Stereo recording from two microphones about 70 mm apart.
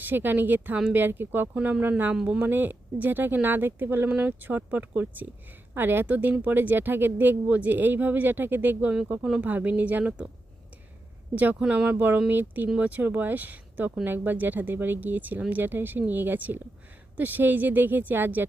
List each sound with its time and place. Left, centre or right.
0.0 s speech: right
11.9 s speech: right
12.6 s speech: centre
12.9 s speech: right